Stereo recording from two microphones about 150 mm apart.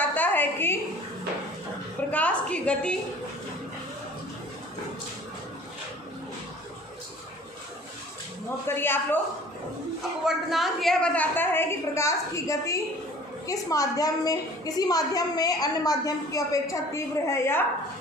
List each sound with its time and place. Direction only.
0.0 s a sound: 10° left (ahead or behind)
2.0 s a woman's voice: 10° left (ahead or behind)
8.6 s a woman's voice: 15° left (ahead or behind)
10.2 s a woman's voice: centre (ahead or behind); by 17.7 s 15° left (ahead or behind)